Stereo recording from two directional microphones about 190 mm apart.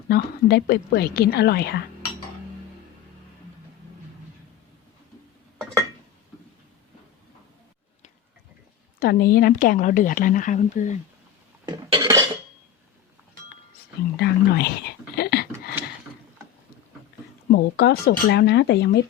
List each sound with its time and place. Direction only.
0.1 s a woman's voice: 55° left (ahead or behind)
9.0 s a woman's voice: 55° left (ahead or behind)
11.9 s dishes: 15° right (ahead or behind)
14.2 s a sound: 60° left (ahead or behind)
17.5 s a woman's voice: 55° left (ahead or behind)